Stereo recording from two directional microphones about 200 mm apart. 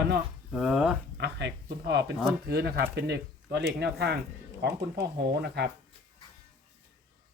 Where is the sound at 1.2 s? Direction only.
60° right (ahead or behind).